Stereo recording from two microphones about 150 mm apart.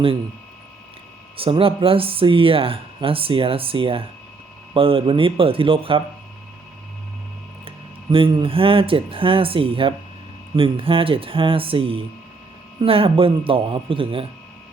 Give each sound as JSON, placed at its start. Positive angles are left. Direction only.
{"t": 1.4, "sound": "speech", "side_deg": -35}
{"t": 8.1, "sound": "speech", "side_deg": -35}